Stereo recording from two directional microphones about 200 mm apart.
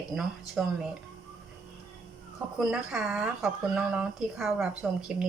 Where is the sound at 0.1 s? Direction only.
5° right (ahead or behind).